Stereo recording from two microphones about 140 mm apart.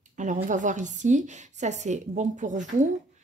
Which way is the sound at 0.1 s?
65° right (ahead or behind).